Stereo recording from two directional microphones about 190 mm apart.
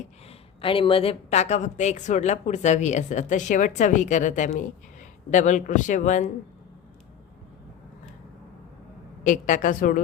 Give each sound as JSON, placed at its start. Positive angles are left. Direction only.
{"t": 0.6, "sound": "a woman's voice", "side_deg": 30}
{"t": 9.2, "sound": "a woman's voice", "side_deg": 40}